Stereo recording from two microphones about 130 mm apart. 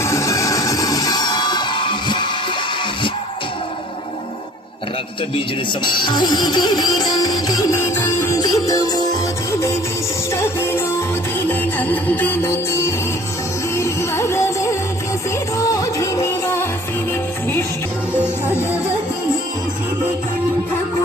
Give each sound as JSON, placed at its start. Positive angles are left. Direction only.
{"t": 0.0, "sound": "music", "side_deg": 25}
{"t": 5.8, "sound": "music", "side_deg": 35}
{"t": 7.7, "sound": "music", "side_deg": 20}
{"t": 10.3, "sound": "music", "side_deg": 20}
{"t": 18.2, "sound": "music", "side_deg": 20}